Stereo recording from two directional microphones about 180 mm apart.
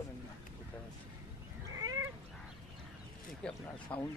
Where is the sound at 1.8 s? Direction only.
20° right (ahead or behind).